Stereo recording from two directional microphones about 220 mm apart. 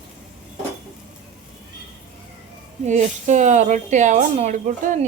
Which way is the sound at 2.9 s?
35° right (ahead or behind).